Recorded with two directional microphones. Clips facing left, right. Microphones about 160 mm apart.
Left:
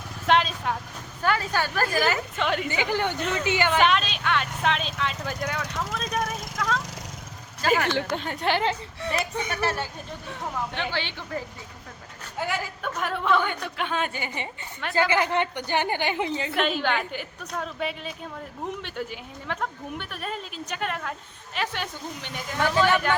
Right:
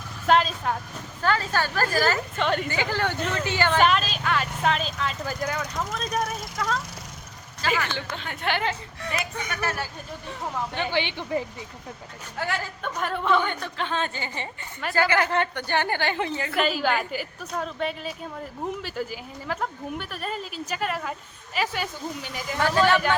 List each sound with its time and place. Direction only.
0.3 s a sound: centre (ahead or behind)
1.2 s a woman's voice: 15° left (ahead or behind)
2.4 s speech: centre (ahead or behind)
2.6 s a woman's voice: 15° left (ahead or behind)
3.8 s vehicle: centre (ahead or behind)
5.9 s speech: centre (ahead or behind)
7.6 s speech: 50° left (ahead or behind)
8.1 s speech: 40° left (ahead or behind)
10.9 s speech: 15° right (ahead or behind)
12.4 s a woman's voice: 15° left (ahead or behind)
13.0 s a woman's voice: centre (ahead or behind); by 16.6 s 20° left (ahead or behind)
16.6 s speech: 5° right (ahead or behind)